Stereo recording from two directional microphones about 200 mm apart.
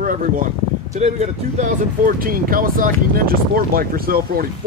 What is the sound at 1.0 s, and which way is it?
Speech, 35° right (ahead or behind).